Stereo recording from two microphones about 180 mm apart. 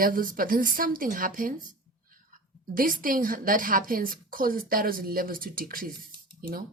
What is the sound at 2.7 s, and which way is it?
Speech, 50° right (ahead or behind).